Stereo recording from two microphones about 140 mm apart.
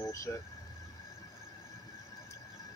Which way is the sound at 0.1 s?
20° left (ahead or behind).